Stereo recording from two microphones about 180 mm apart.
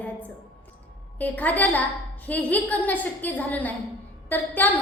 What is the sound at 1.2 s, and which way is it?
A woman's voice, 10° left (ahead or behind).